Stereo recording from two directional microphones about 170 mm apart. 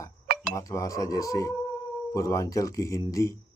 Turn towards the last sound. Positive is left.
turn(degrees=20)  # may be behind; listen again after turning